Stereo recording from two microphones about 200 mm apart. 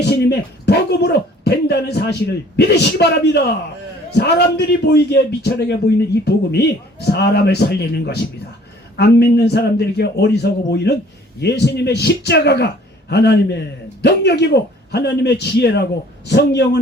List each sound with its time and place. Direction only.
0.0 s a man's voice: 55° left (ahead or behind)